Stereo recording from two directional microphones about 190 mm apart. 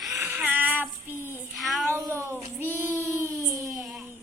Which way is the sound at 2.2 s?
15° right (ahead or behind).